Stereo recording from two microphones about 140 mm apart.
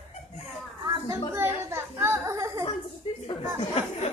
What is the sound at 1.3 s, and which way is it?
Music, 15° right (ahead or behind).